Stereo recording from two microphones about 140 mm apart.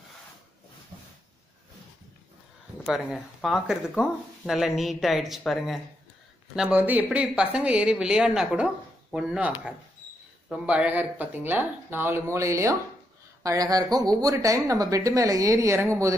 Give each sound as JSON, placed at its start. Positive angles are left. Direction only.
{"t": 2.8, "sound": "a woman's voice", "side_deg": 0}